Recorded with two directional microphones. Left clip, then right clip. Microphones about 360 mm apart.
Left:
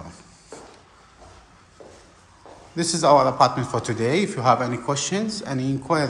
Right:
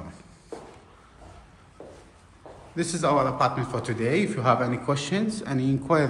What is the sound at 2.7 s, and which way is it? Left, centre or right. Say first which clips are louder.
A man's voice: left 7 dB; centre.